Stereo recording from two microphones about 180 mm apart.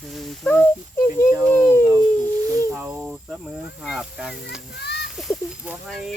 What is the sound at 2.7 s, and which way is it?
Speech, 10° right (ahead or behind).